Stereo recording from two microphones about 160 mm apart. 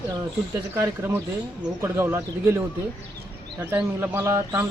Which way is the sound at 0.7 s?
15° right (ahead or behind).